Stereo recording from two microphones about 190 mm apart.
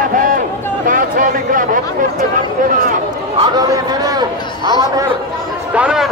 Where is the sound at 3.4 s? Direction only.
20° right (ahead or behind).